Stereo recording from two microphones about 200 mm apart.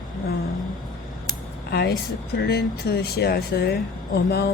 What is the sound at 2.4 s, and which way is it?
Speech, 55° left (ahead or behind).